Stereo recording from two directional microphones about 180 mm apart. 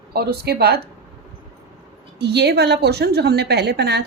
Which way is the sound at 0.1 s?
60° right (ahead or behind).